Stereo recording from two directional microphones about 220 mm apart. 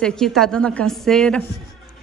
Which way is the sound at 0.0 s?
5° left (ahead or behind).